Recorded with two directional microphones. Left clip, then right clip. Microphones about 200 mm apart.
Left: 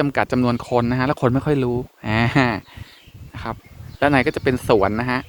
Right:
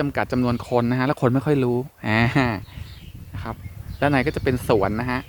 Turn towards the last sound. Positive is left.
turn(degrees=10)  # may be behind; listen again after turning